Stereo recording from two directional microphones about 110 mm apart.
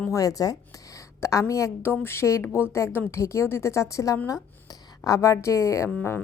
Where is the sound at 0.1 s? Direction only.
30° left (ahead or behind).